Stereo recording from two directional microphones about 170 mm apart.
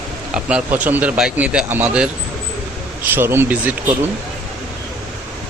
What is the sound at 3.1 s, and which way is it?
Speech, 15° right (ahead or behind).